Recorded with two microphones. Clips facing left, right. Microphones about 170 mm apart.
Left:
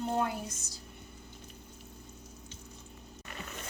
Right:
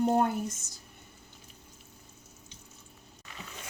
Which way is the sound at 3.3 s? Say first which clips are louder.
Left 2 dB; 55° left (ahead or behind).